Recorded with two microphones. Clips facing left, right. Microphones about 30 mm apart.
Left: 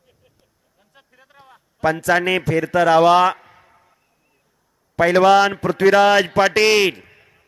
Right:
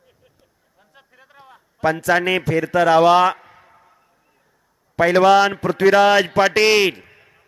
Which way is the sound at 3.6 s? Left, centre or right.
Right.